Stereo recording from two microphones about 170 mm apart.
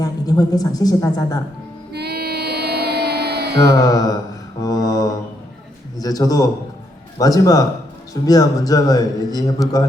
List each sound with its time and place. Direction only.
0.0 s a man's voice: 20° left (ahead or behind)
1.9 s child singing: 75° right (ahead or behind)
3.8 s a man's voice: 20° left (ahead or behind)